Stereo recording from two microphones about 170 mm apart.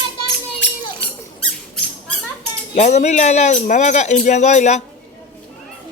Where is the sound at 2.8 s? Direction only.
40° left (ahead or behind).